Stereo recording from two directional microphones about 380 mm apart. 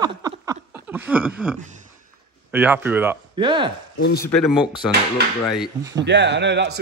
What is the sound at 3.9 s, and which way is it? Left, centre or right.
Speech, left.